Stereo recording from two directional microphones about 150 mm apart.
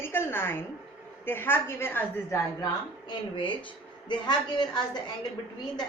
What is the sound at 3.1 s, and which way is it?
A woman's voice, 30° left (ahead or behind).